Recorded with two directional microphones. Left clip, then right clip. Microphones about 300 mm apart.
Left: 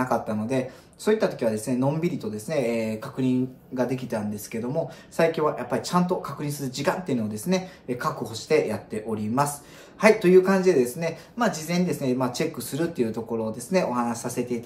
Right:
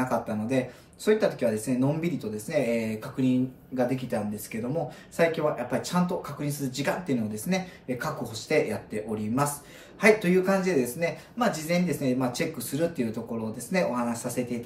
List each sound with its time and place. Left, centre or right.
0.0 s speech: centre